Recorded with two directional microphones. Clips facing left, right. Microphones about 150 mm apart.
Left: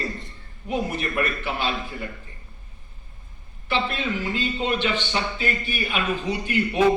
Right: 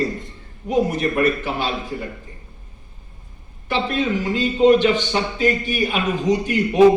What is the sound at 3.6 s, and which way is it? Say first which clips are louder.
A man's voice: right 5 dB; 40° right (ahead or behind).